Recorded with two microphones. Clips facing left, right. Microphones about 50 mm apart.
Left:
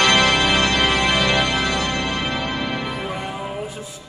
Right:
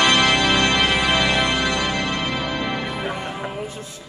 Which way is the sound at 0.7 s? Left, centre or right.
Centre.